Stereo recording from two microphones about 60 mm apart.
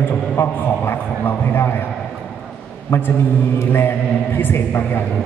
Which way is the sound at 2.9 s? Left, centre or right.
Left.